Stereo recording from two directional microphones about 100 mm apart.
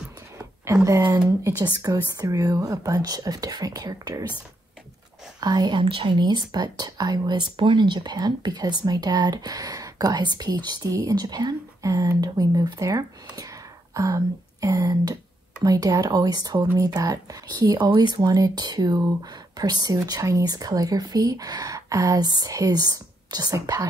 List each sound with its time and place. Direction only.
0.8 s speech: 35° right (ahead or behind)
5.4 s speech: 40° right (ahead or behind)
5.8 s speech: 60° right (ahead or behind); by 7.4 s 45° right (ahead or behind)
7.5 s speech: 55° right (ahead or behind); by 23.9 s 35° right (ahead or behind)